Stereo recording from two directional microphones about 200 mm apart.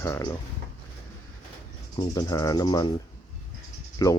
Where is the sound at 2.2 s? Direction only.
15° left (ahead or behind).